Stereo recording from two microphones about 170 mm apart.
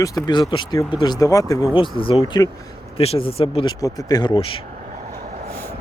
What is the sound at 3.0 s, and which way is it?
Speech, 35° left (ahead or behind).